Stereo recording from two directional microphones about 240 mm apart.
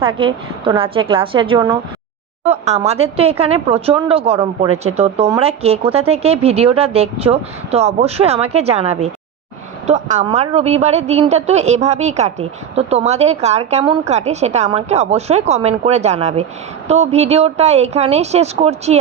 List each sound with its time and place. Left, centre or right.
0.2 s a woman's voice: right
2.4 s a woman's voice: right